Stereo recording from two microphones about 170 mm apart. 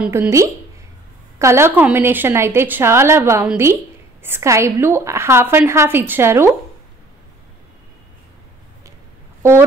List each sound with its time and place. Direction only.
0.0 s a woman's voice: 10° right (ahead or behind)